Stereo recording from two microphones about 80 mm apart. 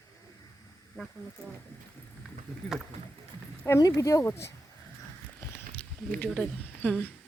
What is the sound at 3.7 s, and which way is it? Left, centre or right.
Speech, left.